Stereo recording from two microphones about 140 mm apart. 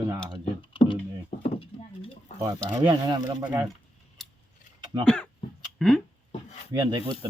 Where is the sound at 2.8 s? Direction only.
35° right (ahead or behind).